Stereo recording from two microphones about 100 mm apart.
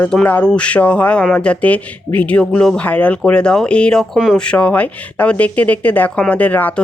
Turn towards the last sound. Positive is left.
turn(degrees=15)  # may be behind; listen again after turning